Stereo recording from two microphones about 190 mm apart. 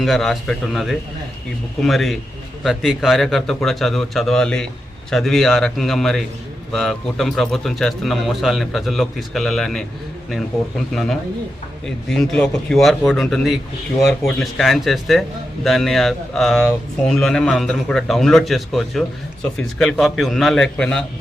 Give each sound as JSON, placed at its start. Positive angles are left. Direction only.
{"t": 0.0, "sound": "a man's voice", "side_deg": 0}
{"t": 10.9, "sound": "a man's voice", "side_deg": 0}